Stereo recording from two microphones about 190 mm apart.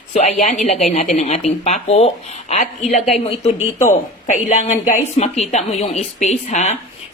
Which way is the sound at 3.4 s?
35° left (ahead or behind).